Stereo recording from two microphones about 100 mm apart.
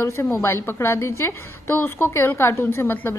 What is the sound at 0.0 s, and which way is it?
A woman's voice, 25° left (ahead or behind).